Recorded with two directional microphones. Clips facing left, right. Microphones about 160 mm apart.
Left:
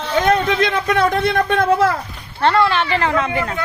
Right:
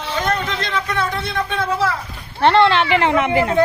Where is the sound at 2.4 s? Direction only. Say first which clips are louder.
Right 2 dB; 25° right (ahead or behind).